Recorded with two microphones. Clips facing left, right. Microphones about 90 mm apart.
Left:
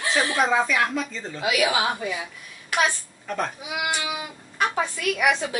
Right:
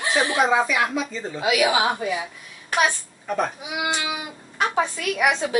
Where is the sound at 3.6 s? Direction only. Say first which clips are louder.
Right 1 dB; 20° right (ahead or behind).